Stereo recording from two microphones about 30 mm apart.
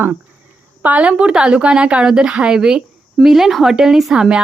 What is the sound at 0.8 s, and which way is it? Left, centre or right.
Speech, right.